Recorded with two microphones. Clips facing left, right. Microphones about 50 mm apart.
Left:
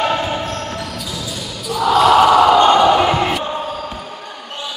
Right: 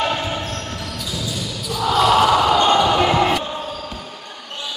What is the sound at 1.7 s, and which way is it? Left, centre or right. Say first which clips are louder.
Basketball bounce: left 4 dB; centre.